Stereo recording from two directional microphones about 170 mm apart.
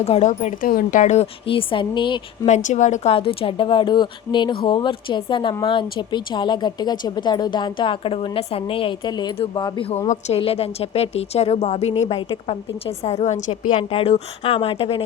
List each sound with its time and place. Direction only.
0.0 s a woman's voice: 40° left (ahead or behind)
2.5 s a woman's voice: 45° left (ahead or behind); by 9.8 s 25° left (ahead or behind)
10.1 s a woman's voice: 40° left (ahead or behind)